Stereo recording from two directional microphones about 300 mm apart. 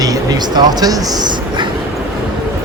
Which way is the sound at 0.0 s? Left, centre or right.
Centre.